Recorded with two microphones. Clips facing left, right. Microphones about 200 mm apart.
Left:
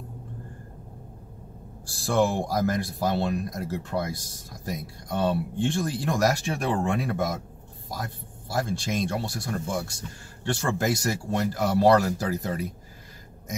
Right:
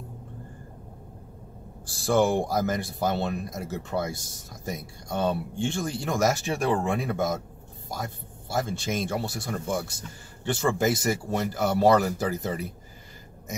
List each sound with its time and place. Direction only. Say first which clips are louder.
1.9 s speech: right 1 dB; centre (ahead or behind)